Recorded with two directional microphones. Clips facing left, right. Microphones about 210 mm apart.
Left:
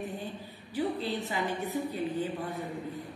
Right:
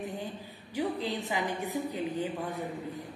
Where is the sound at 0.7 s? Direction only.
15° right (ahead or behind).